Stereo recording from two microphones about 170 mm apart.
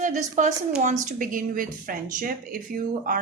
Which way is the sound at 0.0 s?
45° right (ahead or behind).